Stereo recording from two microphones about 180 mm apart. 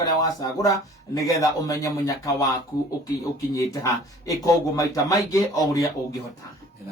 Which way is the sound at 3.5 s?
20° left (ahead or behind).